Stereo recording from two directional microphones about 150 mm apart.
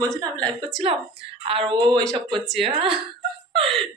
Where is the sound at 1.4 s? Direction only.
35° right (ahead or behind).